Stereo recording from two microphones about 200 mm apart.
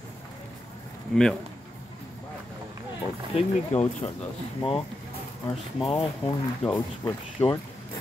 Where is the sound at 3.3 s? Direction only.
30° left (ahead or behind).